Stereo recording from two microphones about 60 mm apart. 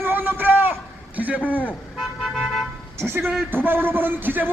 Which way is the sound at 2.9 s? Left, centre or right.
Right.